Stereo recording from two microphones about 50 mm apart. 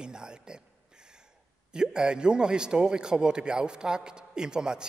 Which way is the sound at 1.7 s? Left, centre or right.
Centre.